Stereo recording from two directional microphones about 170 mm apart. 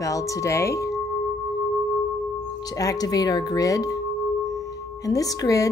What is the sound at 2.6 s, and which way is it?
Speech, 20° left (ahead or behind).